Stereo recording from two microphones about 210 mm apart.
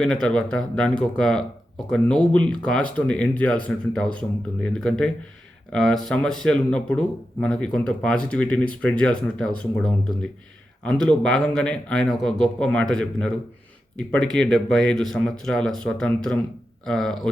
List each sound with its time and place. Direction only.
0.0 s speech: 5° left (ahead or behind)